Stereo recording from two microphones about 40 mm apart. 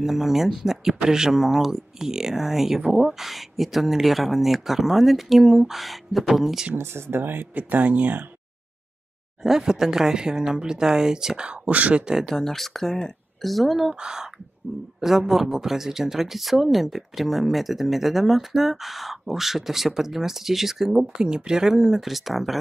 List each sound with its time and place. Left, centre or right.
0.0 s speech: centre
6.7 s speech: right
9.4 s speech: centre
11.6 s speech: right
12.0 s speech: centre
12.3 s speech: centre
13.9 s speech: centre